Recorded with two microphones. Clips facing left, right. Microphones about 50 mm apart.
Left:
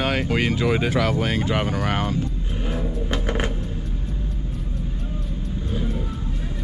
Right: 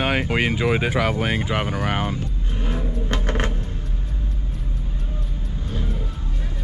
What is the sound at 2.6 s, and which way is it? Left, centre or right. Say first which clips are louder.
Vehicle: even; centre.